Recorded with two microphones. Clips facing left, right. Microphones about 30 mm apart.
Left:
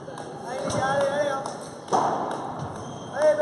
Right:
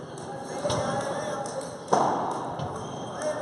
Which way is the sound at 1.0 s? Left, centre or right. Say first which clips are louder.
Left 7 dB; centre.